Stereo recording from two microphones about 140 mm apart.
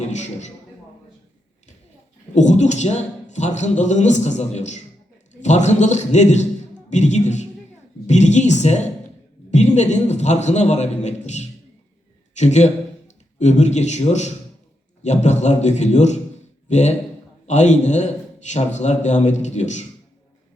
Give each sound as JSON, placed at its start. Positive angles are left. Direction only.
{"t": 0.1, "sound": "a man's voice", "side_deg": 55}
{"t": 2.3, "sound": "a man's voice", "side_deg": 55}